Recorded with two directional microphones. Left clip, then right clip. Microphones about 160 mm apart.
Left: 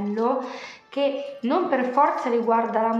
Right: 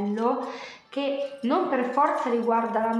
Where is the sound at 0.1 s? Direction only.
15° left (ahead or behind).